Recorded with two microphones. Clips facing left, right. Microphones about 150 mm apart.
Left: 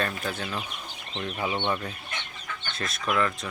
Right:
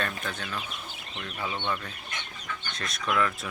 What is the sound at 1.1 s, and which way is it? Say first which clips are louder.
Speech: left 5 dB; 20° left (ahead or behind).